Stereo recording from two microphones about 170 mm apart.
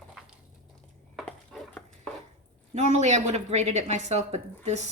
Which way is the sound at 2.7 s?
40° right (ahead or behind).